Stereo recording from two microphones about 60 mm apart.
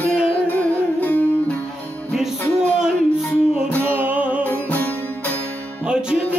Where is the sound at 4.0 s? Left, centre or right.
Right.